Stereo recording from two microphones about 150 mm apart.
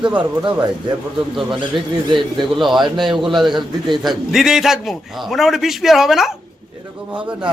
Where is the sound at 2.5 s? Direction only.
Centre (ahead or behind).